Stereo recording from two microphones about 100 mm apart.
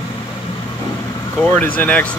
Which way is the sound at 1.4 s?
15° left (ahead or behind).